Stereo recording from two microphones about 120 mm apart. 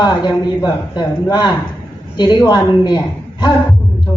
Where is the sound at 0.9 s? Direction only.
35° left (ahead or behind).